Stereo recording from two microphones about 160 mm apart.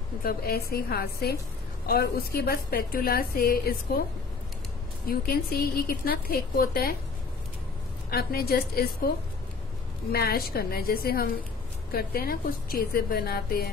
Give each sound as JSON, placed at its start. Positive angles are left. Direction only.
{"t": 0.2, "sound": "a woman's voice", "side_deg": 70}
{"t": 5.0, "sound": "a woman's voice", "side_deg": 65}
{"t": 8.1, "sound": "a woman's voice", "side_deg": 70}
{"t": 10.1, "sound": "a woman's voice", "side_deg": 70}